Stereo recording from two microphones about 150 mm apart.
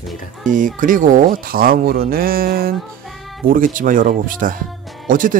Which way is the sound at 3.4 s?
70° right (ahead or behind).